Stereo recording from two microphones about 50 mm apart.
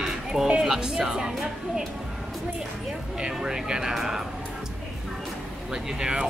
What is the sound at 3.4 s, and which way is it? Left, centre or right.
Speech, centre.